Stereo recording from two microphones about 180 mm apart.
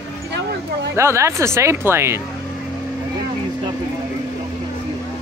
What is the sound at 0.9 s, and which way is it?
Speech, 15° right (ahead or behind).